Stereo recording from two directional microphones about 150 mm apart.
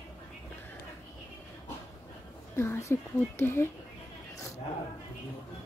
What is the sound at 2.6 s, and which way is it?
Speech, 15° left (ahead or behind).